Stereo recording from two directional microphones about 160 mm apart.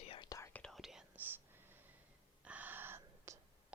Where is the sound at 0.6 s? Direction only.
Centre (ahead or behind).